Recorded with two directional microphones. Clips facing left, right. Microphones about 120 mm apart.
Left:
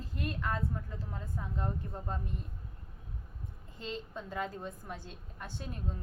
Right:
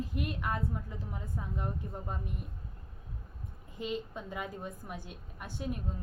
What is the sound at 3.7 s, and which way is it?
A woman's voice, 15° right (ahead or behind).